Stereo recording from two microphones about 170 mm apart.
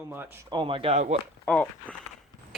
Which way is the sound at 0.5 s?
30° right (ahead or behind).